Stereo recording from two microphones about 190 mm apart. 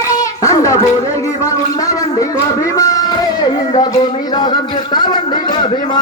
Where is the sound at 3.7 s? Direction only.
35° left (ahead or behind).